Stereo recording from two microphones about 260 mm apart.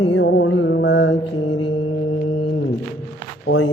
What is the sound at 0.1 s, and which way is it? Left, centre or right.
Mantra, left.